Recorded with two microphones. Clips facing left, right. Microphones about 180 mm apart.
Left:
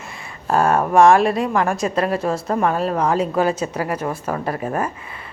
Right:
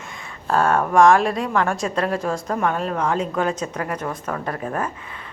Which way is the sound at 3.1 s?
5° left (ahead or behind).